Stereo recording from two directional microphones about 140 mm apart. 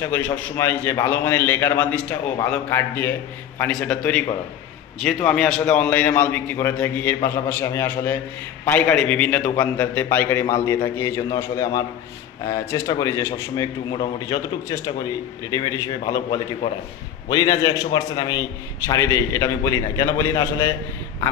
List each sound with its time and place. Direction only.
0.0 s a man's voice: 15° left (ahead or behind)